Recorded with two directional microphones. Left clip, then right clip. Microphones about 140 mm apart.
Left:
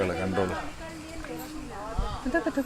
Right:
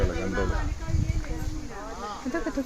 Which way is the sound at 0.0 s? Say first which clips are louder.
Left 2 dB; 15° left (ahead or behind).